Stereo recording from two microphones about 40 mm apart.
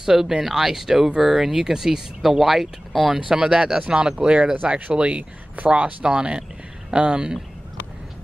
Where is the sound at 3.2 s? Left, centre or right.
Centre; by 5.9 s right.